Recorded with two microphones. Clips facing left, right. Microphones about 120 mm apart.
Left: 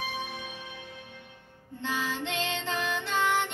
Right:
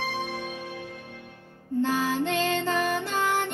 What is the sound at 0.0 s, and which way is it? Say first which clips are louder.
Music: right 5 dB; 40° right (ahead or behind).